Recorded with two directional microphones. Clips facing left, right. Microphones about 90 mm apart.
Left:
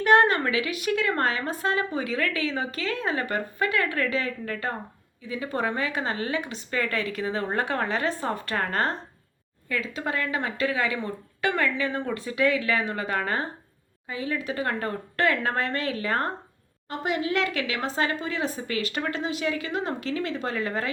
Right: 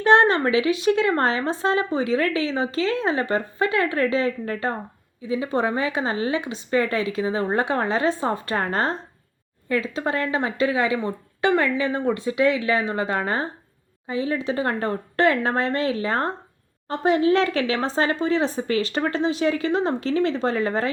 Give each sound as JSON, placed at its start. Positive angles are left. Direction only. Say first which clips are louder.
{"t": 0.0, "sound": "a woman's voice", "louder": "right 3 dB", "side_deg": -25}
{"t": 16.9, "sound": "a woman's voice", "louder": "right 8 dB", "side_deg": -35}